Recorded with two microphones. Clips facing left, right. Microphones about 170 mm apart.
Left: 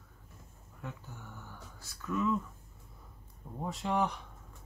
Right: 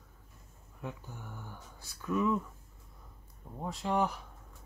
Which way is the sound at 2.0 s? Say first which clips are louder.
Right 2 dB; 15° right (ahead or behind).